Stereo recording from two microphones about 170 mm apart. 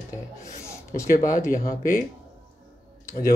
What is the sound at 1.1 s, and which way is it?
Speech, 50° left (ahead or behind).